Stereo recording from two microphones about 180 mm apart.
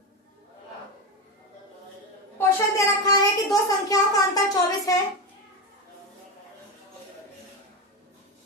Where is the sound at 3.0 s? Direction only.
20° left (ahead or behind).